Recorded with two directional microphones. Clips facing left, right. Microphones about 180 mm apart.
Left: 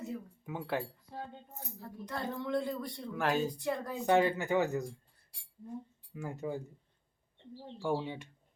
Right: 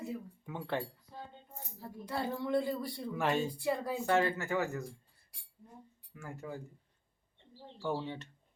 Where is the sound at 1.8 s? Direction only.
10° right (ahead or behind).